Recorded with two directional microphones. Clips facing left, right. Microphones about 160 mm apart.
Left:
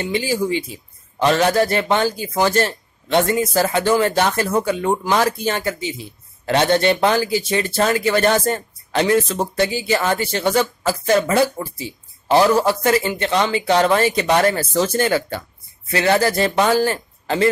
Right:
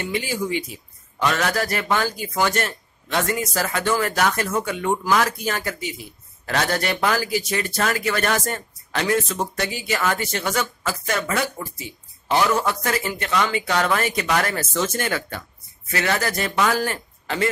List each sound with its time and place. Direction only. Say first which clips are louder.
0.0 s a man's voice: left 5 dB; 30° left (ahead or behind)